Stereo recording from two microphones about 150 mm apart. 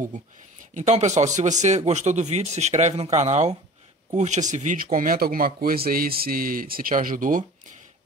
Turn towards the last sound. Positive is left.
turn(degrees=-65)  # may be behind; listen again after turning